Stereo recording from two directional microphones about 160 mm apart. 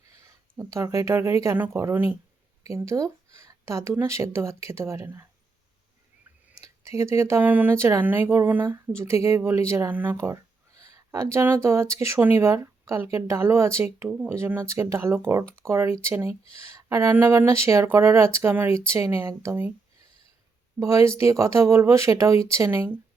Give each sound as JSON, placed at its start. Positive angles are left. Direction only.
{"t": 0.1, "sound": "speech", "side_deg": -20}
{"t": 6.5, "sound": "speech", "side_deg": -20}
{"t": 20.7, "sound": "speech", "side_deg": -20}